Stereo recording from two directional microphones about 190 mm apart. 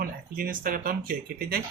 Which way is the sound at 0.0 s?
50° right (ahead or behind).